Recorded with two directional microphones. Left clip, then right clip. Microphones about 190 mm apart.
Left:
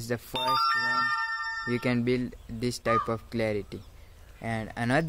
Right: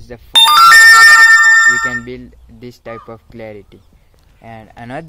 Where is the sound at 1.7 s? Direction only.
15° left (ahead or behind).